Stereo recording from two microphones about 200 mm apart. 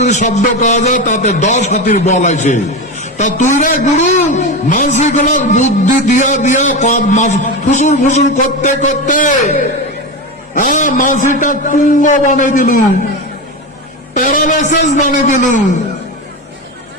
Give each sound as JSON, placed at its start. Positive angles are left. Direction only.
{"t": 0.0, "sound": "a man's voice", "side_deg": 35}
{"t": 14.2, "sound": "a man's voice", "side_deg": 45}